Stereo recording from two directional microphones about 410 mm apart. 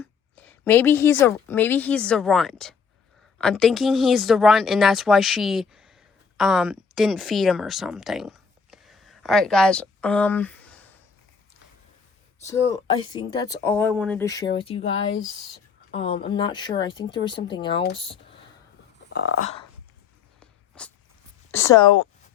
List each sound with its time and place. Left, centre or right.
0.0 s a sound: centre
1.2 s speech: centre
13.1 s speech: centre
19.1 s speech: left
20.4 s a sound: centre
21.5 s speech: centre